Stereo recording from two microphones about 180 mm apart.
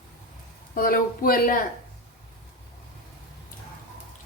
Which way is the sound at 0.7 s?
50° left (ahead or behind).